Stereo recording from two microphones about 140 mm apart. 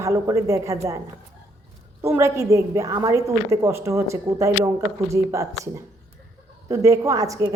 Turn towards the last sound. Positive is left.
turn(degrees=-25)  # may be behind; listen again after turning